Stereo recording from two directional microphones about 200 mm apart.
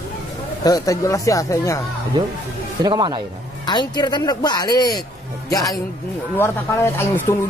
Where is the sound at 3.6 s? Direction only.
20° left (ahead or behind).